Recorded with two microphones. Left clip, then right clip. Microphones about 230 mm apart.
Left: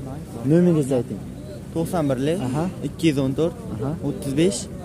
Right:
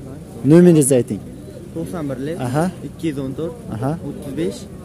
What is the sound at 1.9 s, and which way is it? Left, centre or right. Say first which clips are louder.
Speech: left 4 dB; left.